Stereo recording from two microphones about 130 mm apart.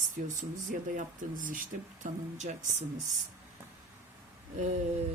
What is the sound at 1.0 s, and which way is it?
Speech, 85° right.